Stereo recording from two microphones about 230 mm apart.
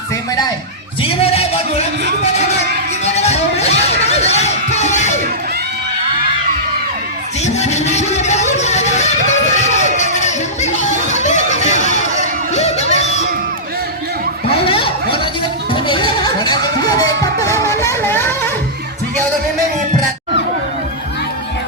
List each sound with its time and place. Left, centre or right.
1.0 s music: left
3.0 s music: left
7.4 s a sound: left
12.5 s crowd: left
14.4 s a sound: left
15.7 s music: left